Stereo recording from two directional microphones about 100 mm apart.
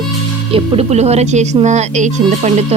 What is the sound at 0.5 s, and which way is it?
Speech, 85° right.